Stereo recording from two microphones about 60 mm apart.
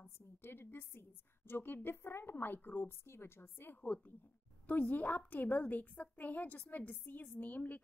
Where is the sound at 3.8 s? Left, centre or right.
Left.